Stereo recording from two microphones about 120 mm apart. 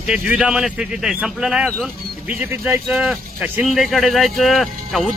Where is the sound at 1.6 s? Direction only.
5° left (ahead or behind).